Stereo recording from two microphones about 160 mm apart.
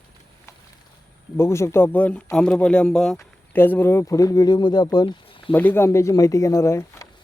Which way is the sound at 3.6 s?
15° left (ahead or behind).